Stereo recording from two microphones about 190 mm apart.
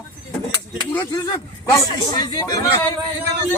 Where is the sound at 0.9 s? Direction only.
15° left (ahead or behind).